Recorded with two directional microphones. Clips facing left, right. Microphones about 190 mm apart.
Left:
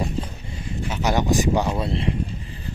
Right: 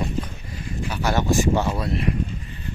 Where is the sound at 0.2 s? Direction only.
25° left (ahead or behind).